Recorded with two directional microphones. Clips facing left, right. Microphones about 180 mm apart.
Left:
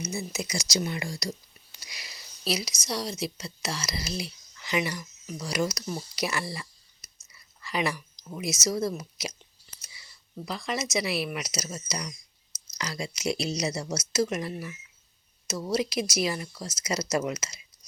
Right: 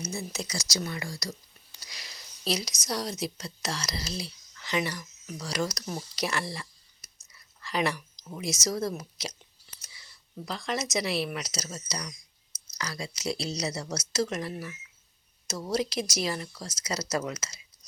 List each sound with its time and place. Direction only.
0.0 s speech: 5° left (ahead or behind)
1.8 s whispering: 10° left (ahead or behind)
3.2 s speech: 5° left (ahead or behind)
6.1 s a sound: 5° left (ahead or behind)
7.6 s speech: 5° left (ahead or behind)
8.1 s a sound: 5° right (ahead or behind)
8.6 s speech: 5° left (ahead or behind)
10.4 s speech: 5° left (ahead or behind)